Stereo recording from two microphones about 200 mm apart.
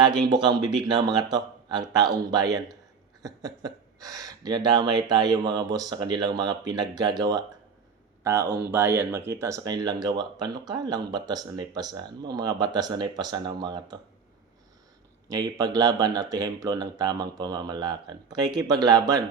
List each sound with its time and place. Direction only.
0.0 s speech: 20° right (ahead or behind)
15.3 s speech: 20° right (ahead or behind)